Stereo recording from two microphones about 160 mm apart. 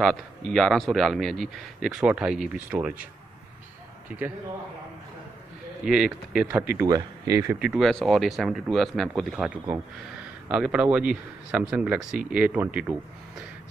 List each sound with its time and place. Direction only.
0.0 s speech: centre (ahead or behind)
4.1 s a man's voice: 10° right (ahead or behind)
5.9 s speech: 5° right (ahead or behind)
6.8 s speech: 20° right (ahead or behind)
7.5 s speech: 5° right (ahead or behind)
10.5 s a man's voice: 5° right (ahead or behind)